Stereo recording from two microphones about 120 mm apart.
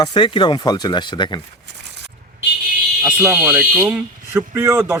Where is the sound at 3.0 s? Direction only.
10° right (ahead or behind).